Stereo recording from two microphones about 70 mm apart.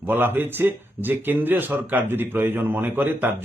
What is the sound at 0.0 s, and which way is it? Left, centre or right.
A man's voice, right.